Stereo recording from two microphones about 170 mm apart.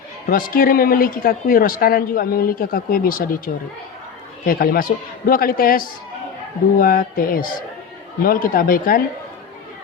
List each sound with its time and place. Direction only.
0.3 s speech: 55° left (ahead or behind)